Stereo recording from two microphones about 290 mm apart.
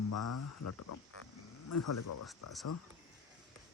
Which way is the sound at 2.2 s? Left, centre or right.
Centre.